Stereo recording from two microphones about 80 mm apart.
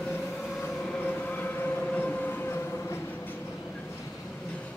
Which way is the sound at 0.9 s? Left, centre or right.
Left.